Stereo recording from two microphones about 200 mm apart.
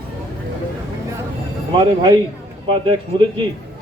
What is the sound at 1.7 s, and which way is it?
A man's voice, 25° right (ahead or behind).